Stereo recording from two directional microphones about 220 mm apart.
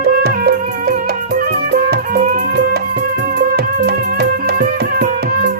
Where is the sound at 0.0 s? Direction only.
45° right (ahead or behind).